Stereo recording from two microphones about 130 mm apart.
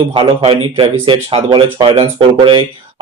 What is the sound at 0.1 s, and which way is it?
Speech, 45° right (ahead or behind).